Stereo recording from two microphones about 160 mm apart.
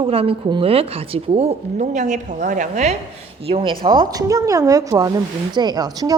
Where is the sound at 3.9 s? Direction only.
25° right (ahead or behind).